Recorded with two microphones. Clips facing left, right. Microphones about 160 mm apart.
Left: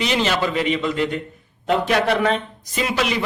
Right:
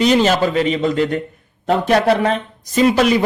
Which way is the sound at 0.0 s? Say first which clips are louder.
Right 7 dB; 40° right (ahead or behind).